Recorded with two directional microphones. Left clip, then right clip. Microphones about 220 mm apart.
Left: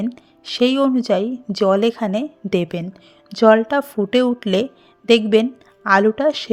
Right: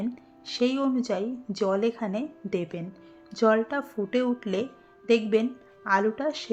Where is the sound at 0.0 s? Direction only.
35° left (ahead or behind).